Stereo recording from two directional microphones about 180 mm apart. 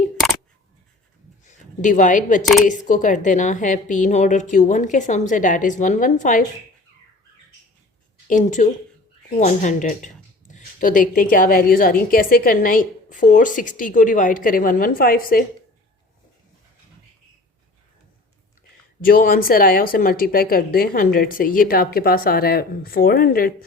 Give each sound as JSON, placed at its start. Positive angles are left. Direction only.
{"t": 1.5, "sound": "speech", "side_deg": 45}
{"t": 2.4, "sound": "speech", "side_deg": 0}
{"t": 2.6, "sound": "a woman's voice", "side_deg": 45}
{"t": 8.3, "sound": "a woman's voice", "side_deg": 45}
{"t": 19.0, "sound": "a woman's voice", "side_deg": 50}